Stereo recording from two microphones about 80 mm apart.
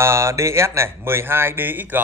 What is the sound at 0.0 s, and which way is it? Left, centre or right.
Speech, right.